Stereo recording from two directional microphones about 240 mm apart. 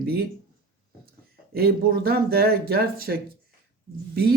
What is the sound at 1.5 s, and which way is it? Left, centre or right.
Speech, right.